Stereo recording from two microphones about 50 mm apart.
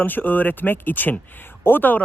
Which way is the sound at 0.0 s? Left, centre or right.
Left.